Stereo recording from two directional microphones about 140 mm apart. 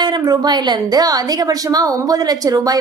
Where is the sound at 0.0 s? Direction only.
30° right (ahead or behind).